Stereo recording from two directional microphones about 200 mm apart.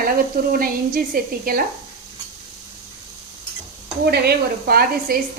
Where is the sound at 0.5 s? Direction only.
45° right (ahead or behind).